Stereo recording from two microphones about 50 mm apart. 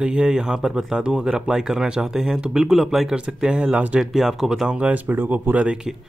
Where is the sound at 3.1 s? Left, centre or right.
Centre.